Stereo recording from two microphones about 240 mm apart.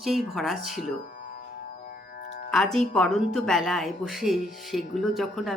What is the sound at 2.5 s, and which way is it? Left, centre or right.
Speech, centre.